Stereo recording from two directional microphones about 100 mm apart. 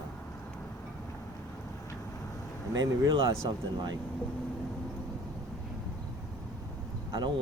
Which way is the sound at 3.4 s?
45° right (ahead or behind).